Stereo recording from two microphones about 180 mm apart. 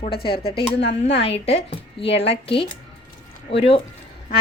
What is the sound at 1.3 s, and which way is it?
A woman's voice, 35° left (ahead or behind).